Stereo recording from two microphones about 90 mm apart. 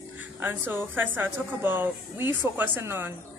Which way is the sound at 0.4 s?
25° right (ahead or behind).